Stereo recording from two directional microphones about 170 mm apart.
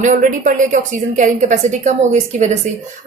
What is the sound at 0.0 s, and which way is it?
Speech, 50° right (ahead or behind).